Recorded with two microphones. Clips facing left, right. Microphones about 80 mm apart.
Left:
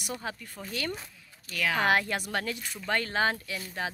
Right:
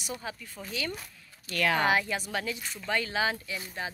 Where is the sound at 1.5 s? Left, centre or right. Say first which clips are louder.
Right 2 dB; centre.